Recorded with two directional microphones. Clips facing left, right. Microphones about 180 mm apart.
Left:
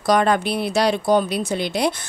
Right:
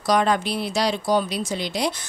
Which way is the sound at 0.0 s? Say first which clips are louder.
Left 3 dB; 55° left (ahead or behind).